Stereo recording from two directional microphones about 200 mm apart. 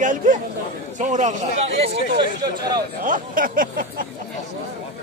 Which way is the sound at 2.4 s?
20° right (ahead or behind).